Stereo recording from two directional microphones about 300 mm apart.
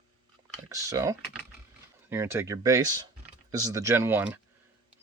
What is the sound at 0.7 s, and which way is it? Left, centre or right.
Speech, centre.